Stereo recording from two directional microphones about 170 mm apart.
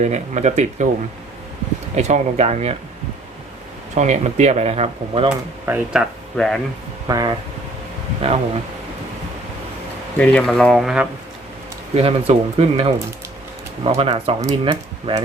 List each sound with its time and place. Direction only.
0.0 s speech: 45° right (ahead or behind)
2.0 s speech: 40° right (ahead or behind)
3.9 s speech: 45° right (ahead or behind)
5.6 s speech: 10° right (ahead or behind)
7.1 s speech: 20° right (ahead or behind)
8.2 s speech: 35° right (ahead or behind)
10.2 s speech: 5° left (ahead or behind)
11.9 s speech: 35° right (ahead or behind)